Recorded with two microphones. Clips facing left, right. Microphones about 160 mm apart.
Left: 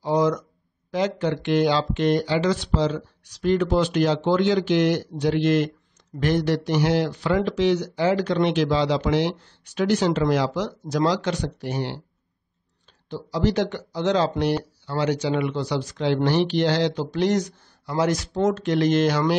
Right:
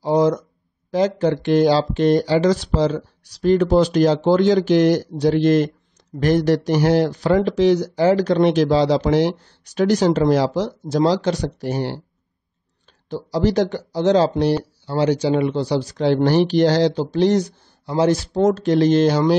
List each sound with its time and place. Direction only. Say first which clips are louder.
0.0 s speech: right 4 dB; 35° right (ahead or behind)
13.1 s speech: right 4 dB; 40° right (ahead or behind)